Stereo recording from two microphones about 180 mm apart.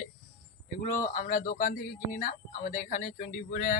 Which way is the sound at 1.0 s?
50° left (ahead or behind).